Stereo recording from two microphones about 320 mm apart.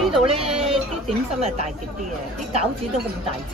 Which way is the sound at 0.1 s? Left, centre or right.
Centre.